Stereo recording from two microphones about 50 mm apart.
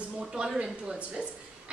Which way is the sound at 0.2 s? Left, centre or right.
Centre.